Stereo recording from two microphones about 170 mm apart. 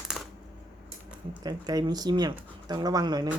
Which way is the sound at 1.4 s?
25° right (ahead or behind).